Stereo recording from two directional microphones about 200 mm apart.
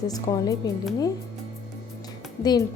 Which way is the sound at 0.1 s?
20° left (ahead or behind).